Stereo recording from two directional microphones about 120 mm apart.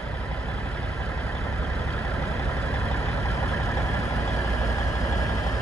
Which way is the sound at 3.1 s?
25° left (ahead or behind).